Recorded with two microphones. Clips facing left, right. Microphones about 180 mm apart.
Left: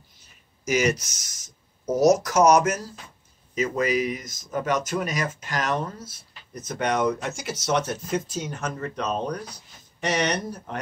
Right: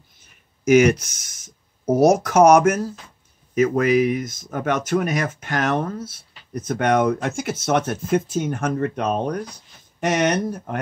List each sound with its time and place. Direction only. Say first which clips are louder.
0.7 s speech: right 9 dB; 55° right (ahead or behind)